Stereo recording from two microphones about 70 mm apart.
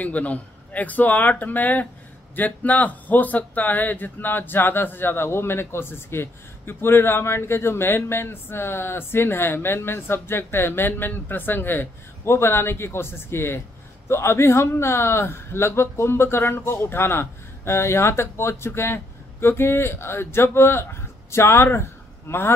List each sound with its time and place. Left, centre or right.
0.0 s speech: left